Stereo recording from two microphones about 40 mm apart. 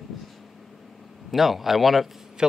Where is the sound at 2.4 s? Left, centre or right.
Centre.